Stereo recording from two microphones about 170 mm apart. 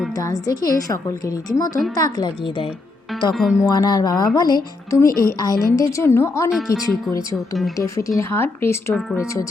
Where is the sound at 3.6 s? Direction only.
20° left (ahead or behind).